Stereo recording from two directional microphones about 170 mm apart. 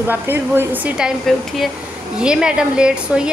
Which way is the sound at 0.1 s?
10° right (ahead or behind).